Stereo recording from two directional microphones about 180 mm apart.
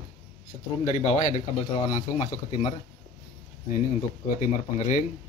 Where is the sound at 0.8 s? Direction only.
35° left (ahead or behind).